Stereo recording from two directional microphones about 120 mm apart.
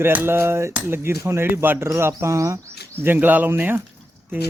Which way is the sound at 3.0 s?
15° right (ahead or behind).